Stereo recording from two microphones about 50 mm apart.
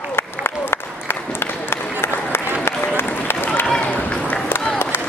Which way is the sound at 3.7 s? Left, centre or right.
Left.